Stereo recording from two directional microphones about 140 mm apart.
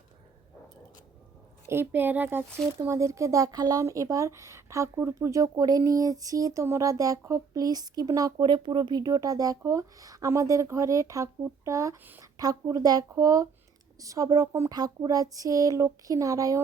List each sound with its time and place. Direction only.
1.6 s speech: 15° right (ahead or behind)